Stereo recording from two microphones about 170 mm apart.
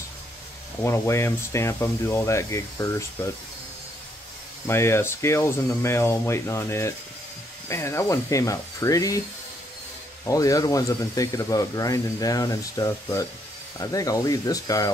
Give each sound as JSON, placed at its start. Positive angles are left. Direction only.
{"t": 0.8, "sound": "speech", "side_deg": 15}
{"t": 4.6, "sound": "speech", "side_deg": 15}
{"t": 10.2, "sound": "speech", "side_deg": 20}